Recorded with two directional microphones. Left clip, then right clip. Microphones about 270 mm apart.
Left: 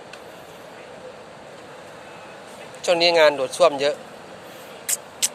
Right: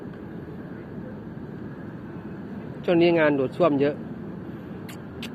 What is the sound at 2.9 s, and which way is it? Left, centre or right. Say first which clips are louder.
A man's voice: left 4 dB; left.